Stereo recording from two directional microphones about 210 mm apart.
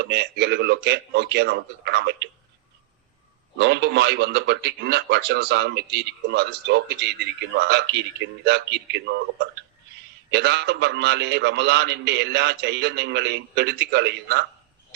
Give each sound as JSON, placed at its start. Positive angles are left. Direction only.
{"t": 0.0, "sound": "speech", "side_deg": -55}
{"t": 3.6, "sound": "speech", "side_deg": -55}